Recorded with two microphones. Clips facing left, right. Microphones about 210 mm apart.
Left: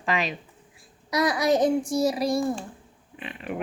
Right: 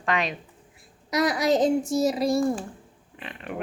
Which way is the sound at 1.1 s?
20° right (ahead or behind).